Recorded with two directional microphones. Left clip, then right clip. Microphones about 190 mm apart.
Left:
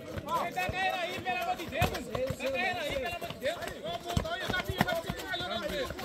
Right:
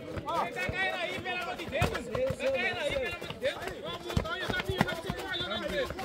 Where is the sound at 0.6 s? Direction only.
55° right (ahead or behind).